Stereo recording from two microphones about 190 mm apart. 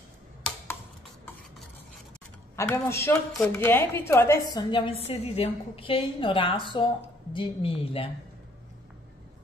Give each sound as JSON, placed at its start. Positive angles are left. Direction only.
{"t": 2.5, "sound": "a woman's voice", "side_deg": 15}
{"t": 4.6, "sound": "a woman's voice", "side_deg": 25}